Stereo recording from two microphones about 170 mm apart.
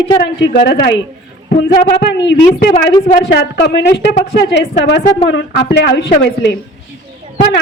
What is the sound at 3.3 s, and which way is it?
A woman's voice, 75° left (ahead or behind).